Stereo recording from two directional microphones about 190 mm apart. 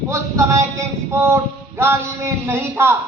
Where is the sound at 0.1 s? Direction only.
15° right (ahead or behind).